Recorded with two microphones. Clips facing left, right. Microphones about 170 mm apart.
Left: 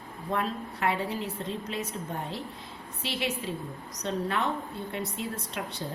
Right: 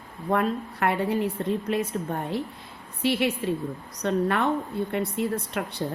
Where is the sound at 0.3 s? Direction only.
55° right (ahead or behind).